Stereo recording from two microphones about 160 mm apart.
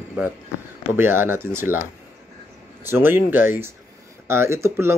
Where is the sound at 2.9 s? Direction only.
15° right (ahead or behind).